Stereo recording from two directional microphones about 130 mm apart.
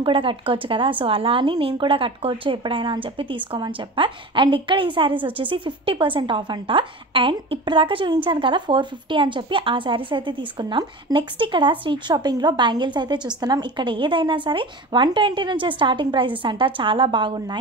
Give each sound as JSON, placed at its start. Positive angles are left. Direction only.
{"t": 0.0, "sound": "speech", "side_deg": -40}